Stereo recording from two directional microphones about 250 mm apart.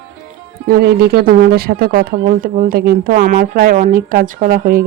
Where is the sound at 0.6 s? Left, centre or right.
Right.